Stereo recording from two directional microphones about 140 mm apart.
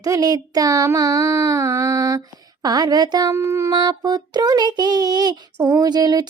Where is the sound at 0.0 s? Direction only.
25° right (ahead or behind).